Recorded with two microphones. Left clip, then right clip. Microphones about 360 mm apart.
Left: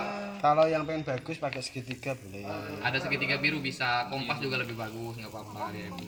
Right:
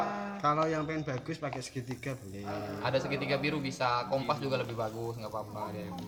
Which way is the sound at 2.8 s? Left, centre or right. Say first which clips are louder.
Left 3 dB; centre.